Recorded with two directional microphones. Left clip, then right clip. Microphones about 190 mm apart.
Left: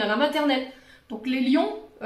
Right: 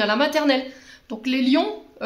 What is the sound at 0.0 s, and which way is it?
Speech, 50° right (ahead or behind).